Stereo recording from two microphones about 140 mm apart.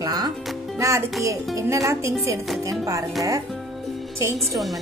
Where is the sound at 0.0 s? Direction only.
30° right (ahead or behind).